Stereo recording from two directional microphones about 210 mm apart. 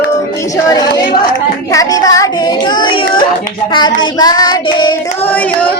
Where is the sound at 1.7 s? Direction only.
15° left (ahead or behind).